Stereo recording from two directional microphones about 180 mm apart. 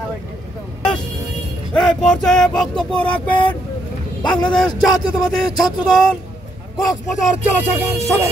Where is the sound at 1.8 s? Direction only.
5° left (ahead or behind).